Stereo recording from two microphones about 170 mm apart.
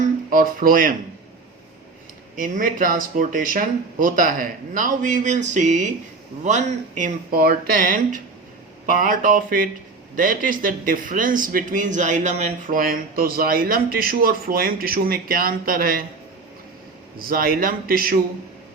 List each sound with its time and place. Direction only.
0.3 s speech: 55° right (ahead or behind)
2.3 s speech: 50° right (ahead or behind)
17.2 s speech: 60° right (ahead or behind)